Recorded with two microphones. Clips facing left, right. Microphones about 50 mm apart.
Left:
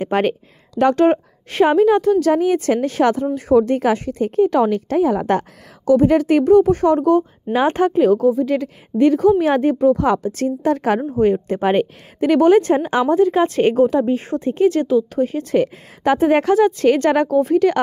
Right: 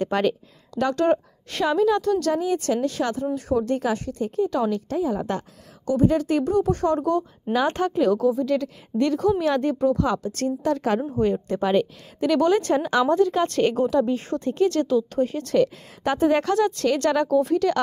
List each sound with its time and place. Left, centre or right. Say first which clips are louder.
0.1 s a woman's voice: left 4 dB; left
2.3 s a woman's voice: left 6 dB; left
11.6 s a woman's voice: left 3 dB; left; by 17.7 s centre